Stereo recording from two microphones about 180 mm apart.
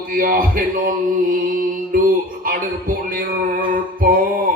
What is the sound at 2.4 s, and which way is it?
Music, 50° right (ahead or behind).